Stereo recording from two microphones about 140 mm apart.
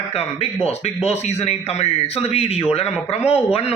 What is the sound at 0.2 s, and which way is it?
A man's voice, 50° left (ahead or behind).